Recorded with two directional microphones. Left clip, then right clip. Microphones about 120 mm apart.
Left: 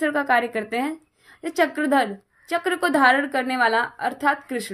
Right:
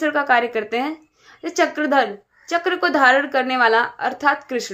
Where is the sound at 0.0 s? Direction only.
35° left (ahead or behind).